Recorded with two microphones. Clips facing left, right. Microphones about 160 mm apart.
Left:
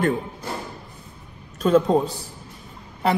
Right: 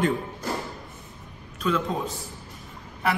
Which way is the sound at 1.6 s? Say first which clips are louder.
Left 9 dB; 40° left (ahead or behind).